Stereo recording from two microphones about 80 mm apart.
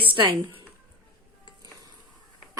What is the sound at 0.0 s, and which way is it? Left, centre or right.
Speech, right.